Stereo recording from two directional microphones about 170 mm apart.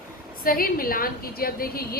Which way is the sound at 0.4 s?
60° left (ahead or behind).